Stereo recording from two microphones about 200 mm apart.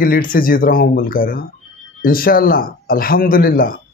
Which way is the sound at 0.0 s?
45° left (ahead or behind).